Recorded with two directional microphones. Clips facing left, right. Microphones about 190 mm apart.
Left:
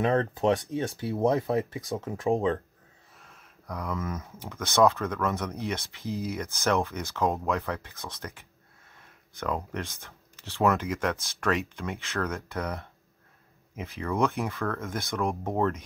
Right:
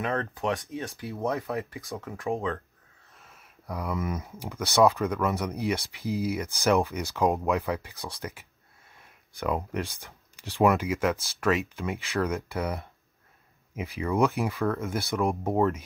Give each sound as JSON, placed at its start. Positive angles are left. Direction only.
{"t": 0.0, "sound": "speech", "side_deg": 35}
{"t": 1.6, "sound": "speech", "side_deg": 20}
{"t": 3.2, "sound": "speech", "side_deg": -5}